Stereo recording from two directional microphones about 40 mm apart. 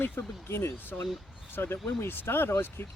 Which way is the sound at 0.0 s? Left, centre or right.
Left.